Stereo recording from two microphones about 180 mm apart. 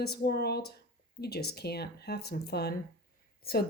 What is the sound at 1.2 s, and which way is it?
Speech, 60° left (ahead or behind).